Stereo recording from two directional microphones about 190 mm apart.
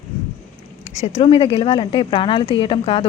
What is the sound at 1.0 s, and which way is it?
A woman's voice, 35° left (ahead or behind).